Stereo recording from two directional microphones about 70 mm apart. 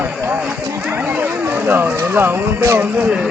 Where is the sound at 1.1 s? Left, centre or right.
Right.